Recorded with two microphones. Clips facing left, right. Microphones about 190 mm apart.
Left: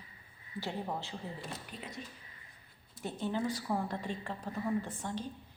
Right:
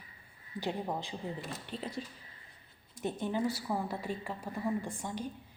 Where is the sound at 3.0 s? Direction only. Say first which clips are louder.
Right 2 dB; 15° right (ahead or behind).